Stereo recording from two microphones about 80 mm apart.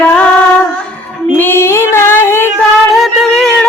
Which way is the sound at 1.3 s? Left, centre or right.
Left.